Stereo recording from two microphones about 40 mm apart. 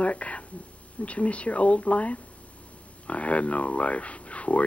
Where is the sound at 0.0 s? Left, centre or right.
Left.